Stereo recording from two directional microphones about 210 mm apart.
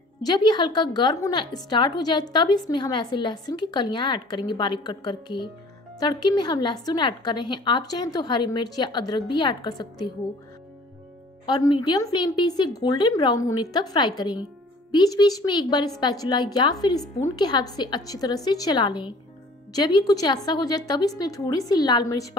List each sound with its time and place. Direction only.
0.2 s a woman's voice: 20° left (ahead or behind)
11.4 s a woman's voice: 20° left (ahead or behind)